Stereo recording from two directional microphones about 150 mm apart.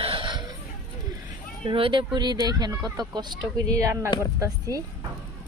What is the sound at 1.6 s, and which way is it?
Speech, 35° right (ahead or behind).